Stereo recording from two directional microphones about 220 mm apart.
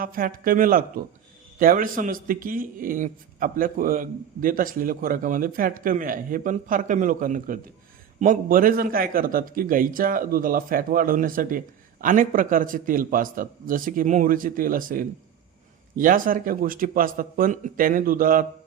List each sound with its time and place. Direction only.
0.0 s a man's voice: 40° right (ahead or behind)